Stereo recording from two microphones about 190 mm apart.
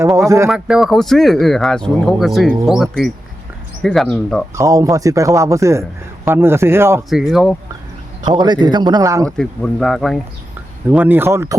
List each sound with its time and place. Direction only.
0.2 s speech: 15° right (ahead or behind)
0.5 s speech: 5° right (ahead or behind)
4.5 s speech: 15° right (ahead or behind)
7.1 s speech: centre (ahead or behind)
8.2 s a man's voice: 20° right (ahead or behind)
9.4 s speech: centre (ahead or behind); by 11.5 s 15° right (ahead or behind)